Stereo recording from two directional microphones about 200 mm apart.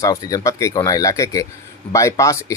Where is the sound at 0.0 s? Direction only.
15° left (ahead or behind).